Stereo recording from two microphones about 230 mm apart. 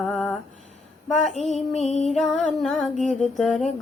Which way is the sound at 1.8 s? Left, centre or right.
Left.